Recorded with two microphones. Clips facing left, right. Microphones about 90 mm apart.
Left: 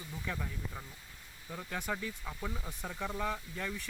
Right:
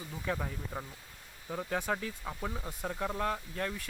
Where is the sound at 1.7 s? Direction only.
25° right (ahead or behind); by 3.6 s 5° right (ahead or behind).